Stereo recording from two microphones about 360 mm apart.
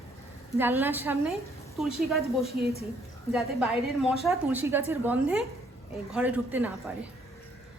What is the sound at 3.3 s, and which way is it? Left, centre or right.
A woman's voice, centre.